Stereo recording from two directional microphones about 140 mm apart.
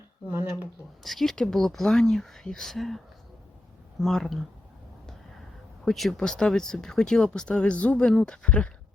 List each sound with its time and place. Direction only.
0.3 s speech: 15° right (ahead or behind)
1.0 s speech: centre (ahead or behind)
4.0 s speech: centre (ahead or behind)
5.8 s speech: centre (ahead or behind)